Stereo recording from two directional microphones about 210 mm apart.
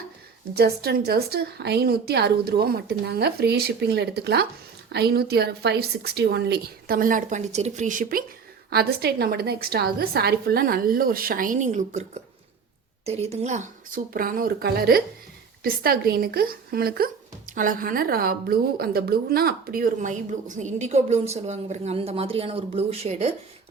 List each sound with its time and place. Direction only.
0.5 s a woman's voice: 50° right (ahead or behind); by 23.3 s 30° right (ahead or behind)